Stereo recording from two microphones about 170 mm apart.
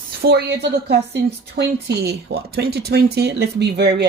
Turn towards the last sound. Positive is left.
turn(degrees=-80)